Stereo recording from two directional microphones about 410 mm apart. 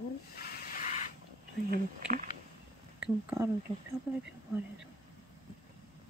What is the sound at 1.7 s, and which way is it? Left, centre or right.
Speech, centre.